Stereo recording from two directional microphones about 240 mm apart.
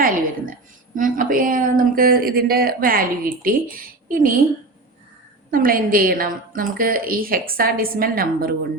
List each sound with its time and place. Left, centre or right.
0.0 s a sound: right
0.9 s a woman's voice: right
5.5 s a woman's voice: right